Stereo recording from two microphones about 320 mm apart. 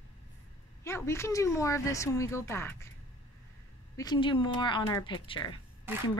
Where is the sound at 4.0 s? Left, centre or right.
Centre.